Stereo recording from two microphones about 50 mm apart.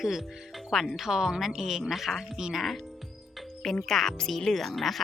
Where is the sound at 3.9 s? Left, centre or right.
Centre.